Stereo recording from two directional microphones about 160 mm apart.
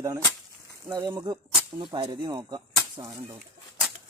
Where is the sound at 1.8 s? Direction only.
30° right (ahead or behind).